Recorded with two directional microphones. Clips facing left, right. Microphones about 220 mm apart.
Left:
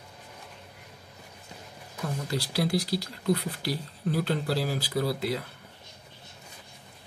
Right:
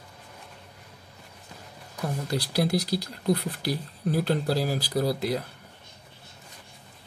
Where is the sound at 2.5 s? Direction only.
45° right (ahead or behind).